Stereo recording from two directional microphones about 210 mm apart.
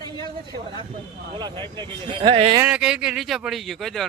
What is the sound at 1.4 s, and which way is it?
Speech, 20° right (ahead or behind).